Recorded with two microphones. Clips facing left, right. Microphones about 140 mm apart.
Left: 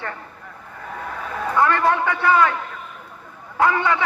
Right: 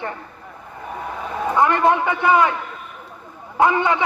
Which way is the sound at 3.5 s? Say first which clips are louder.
Right 2 dB; 20° right (ahead or behind).